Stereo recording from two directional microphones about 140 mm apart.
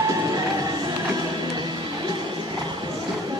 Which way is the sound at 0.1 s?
25° right (ahead or behind).